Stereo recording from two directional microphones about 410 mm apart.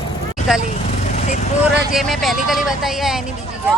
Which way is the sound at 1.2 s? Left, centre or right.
Centre.